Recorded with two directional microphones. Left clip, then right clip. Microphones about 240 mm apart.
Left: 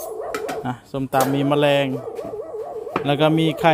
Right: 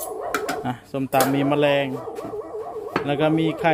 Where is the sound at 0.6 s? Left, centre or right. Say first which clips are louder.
Even; centre.